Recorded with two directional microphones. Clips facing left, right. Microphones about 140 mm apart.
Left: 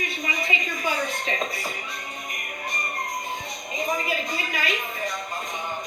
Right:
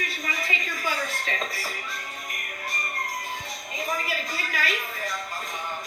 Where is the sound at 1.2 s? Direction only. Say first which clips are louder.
Left 3 dB; 20° left (ahead or behind).